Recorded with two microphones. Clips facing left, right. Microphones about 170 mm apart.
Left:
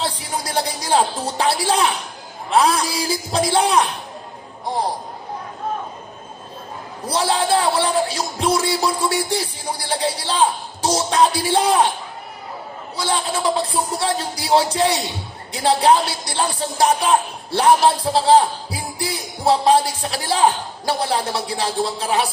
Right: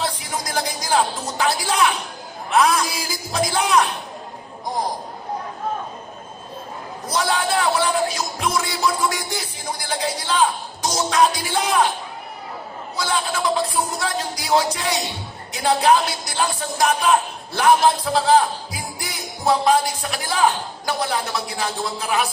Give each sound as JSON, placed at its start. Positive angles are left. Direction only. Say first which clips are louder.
{"t": 0.0, "sound": "speech", "louder": "left 1 dB", "side_deg": 30}
{"t": 7.0, "sound": "speech", "louder": "left 2 dB", "side_deg": 30}
{"t": 13.0, "sound": "speech", "louder": "left 1 dB", "side_deg": 30}